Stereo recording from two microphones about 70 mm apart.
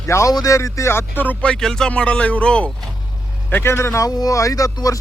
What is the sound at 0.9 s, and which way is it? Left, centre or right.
Music, left.